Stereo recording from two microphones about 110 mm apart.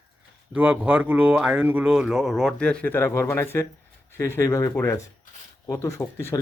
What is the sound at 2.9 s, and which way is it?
Speech, 25° left (ahead or behind).